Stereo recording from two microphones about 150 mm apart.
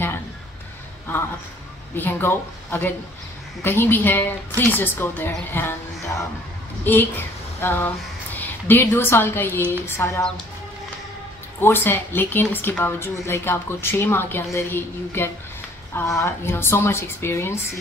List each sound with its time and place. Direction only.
2.0 s a woman's voice: 15° left (ahead or behind)
11.6 s a woman's voice: 15° left (ahead or behind)